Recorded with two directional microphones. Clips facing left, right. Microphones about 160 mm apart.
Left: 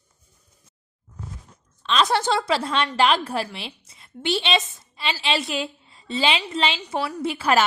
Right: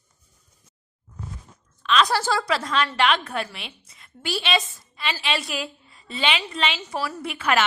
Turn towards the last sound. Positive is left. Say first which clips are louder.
# left 3 dB
turn(degrees=35)  # may be behind; listen again after turning